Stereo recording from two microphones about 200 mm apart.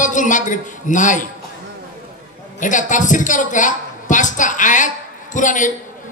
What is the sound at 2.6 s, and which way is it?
A woman's voice, 40° left (ahead or behind).